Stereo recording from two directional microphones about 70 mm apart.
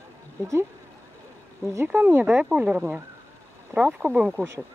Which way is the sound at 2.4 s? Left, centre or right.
Centre.